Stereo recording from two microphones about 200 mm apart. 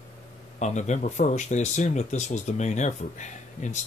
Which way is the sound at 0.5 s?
35° left (ahead or behind).